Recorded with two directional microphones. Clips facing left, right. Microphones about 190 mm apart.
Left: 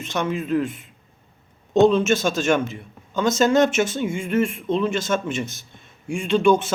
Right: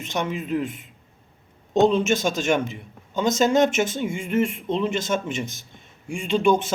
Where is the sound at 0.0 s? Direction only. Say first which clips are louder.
Left 2 dB; 15° right (ahead or behind).